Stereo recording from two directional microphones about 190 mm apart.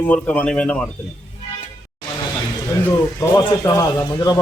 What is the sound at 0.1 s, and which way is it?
Speech, 10° left (ahead or behind).